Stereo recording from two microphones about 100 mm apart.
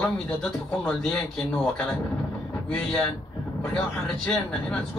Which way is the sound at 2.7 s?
15° left (ahead or behind).